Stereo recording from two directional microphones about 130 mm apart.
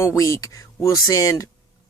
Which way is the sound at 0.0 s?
25° left (ahead or behind).